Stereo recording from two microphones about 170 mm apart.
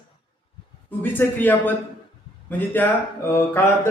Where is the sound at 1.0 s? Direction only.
10° left (ahead or behind).